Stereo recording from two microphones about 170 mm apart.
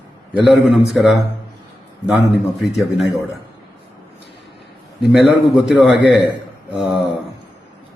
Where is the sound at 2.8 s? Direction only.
Centre (ahead or behind).